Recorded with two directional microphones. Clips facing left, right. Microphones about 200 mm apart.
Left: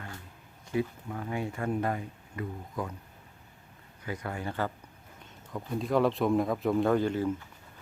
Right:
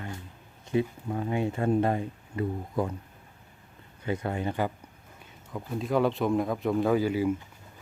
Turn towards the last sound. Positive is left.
turn(degrees=-10)  # may be behind; listen again after turning